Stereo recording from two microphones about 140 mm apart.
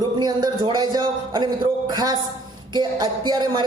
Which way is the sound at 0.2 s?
30° right (ahead or behind).